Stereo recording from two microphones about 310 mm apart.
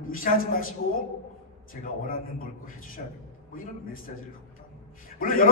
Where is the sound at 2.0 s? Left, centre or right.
Left.